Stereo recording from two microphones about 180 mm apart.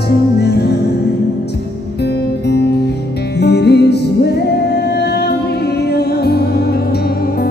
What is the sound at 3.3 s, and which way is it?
Music, 65° left (ahead or behind).